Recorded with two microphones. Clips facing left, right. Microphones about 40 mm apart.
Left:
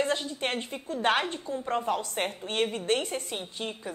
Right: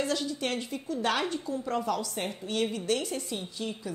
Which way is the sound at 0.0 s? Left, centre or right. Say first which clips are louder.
Left 1 dB; left.